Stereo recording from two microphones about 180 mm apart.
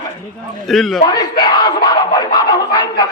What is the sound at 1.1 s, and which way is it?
Speech, 25° left (ahead or behind).